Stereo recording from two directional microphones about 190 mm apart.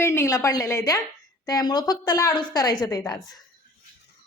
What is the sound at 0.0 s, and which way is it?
Speech, 15° left (ahead or behind).